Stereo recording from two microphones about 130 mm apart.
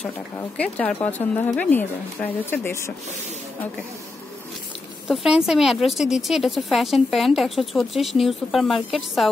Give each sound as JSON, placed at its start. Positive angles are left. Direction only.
{"t": 0.4, "sound": "speech", "side_deg": 10}
{"t": 5.0, "sound": "a woman's voice", "side_deg": -5}